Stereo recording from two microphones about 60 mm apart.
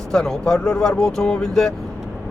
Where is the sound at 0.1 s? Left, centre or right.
Centre.